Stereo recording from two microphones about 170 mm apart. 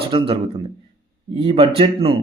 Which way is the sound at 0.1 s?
30° right (ahead or behind).